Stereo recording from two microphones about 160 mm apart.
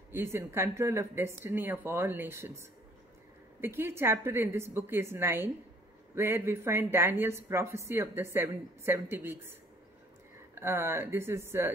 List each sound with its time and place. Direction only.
0.1 s speech: 15° right (ahead or behind)
3.6 s speech: 15° right (ahead or behind)
10.5 s speech: 15° right (ahead or behind)